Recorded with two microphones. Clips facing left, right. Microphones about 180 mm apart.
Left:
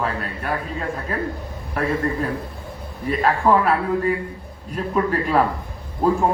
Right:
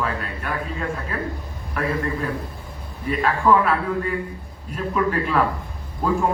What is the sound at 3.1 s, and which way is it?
A man's voice, 40° left (ahead or behind).